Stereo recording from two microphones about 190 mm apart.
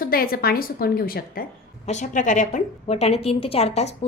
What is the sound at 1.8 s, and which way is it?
A woman's voice, 40° left (ahead or behind).